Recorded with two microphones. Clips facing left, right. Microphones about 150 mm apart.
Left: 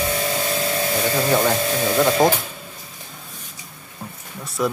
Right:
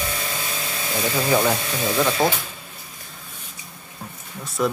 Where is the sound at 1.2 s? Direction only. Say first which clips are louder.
Even; centre (ahead or behind).